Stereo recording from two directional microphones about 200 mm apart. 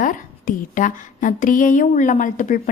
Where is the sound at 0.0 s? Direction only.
40° left (ahead or behind).